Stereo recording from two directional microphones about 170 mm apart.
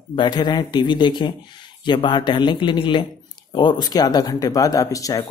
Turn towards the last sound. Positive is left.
turn(degrees=20)  # may be behind; listen again after turning